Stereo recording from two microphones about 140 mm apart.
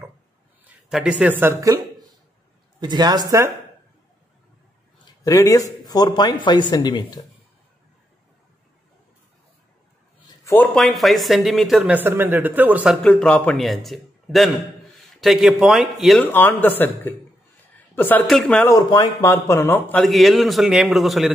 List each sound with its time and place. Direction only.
0.7 s a man's voice: 5° right (ahead or behind); by 3.5 s 25° right (ahead or behind)
5.2 s speech: 25° left (ahead or behind)
10.5 s speech: 15° left (ahead or behind)
10.8 s a man's voice: centre (ahead or behind)
12.0 s a man's voice: 15° right (ahead or behind)
13.0 s a man's voice: 10° left (ahead or behind)
16.3 s speech: 15° left (ahead or behind)
17.7 s a sound: 15° left (ahead or behind)
18.2 s a man's voice: centre (ahead or behind)
18.7 s speech: 25° left (ahead or behind)
20.0 s a man's voice: centre (ahead or behind)